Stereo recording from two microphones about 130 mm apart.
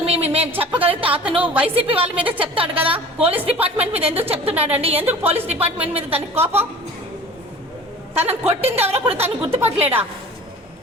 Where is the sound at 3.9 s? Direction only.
50° right (ahead or behind).